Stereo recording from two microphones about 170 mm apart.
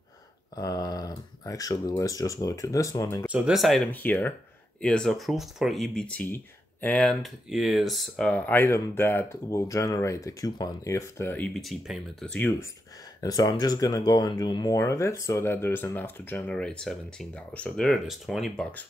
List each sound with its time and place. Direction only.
0.6 s speech: 20° left (ahead or behind)
3.3 s speech: 5° right (ahead or behind)
13.2 s speech: 20° left (ahead or behind); by 18.9 s 5° left (ahead or behind)